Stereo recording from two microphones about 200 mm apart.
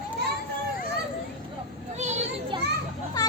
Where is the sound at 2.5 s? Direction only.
25° right (ahead or behind).